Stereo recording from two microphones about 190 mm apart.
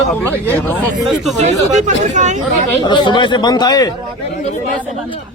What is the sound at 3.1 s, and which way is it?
Speech, 25° left (ahead or behind).